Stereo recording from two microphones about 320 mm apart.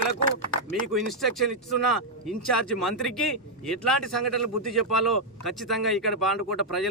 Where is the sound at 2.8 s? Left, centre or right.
Centre.